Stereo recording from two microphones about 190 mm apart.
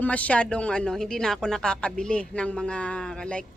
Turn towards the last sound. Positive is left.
turn(degrees=5)  # may be behind; listen again after turning